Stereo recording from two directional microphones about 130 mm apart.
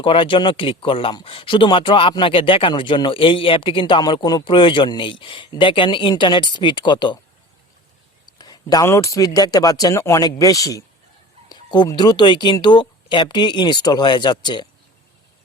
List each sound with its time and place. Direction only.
0.0 s speech: 40° left (ahead or behind)
8.3 s speech: 30° left (ahead or behind)